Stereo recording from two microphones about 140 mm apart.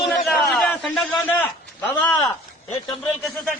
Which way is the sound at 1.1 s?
15° left (ahead or behind).